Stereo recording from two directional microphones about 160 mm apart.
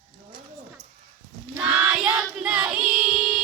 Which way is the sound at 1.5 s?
15° right (ahead or behind).